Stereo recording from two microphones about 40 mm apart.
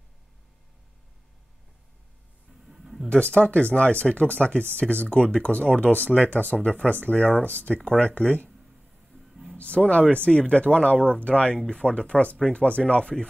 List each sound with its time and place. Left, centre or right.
2.6 s a sound: centre
3.1 s speech: left
9.3 s music: centre
9.8 s speech: left
11.5 s speech: centre